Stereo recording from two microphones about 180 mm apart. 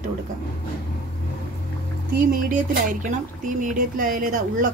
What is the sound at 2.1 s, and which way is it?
Speech, 50° right (ahead or behind).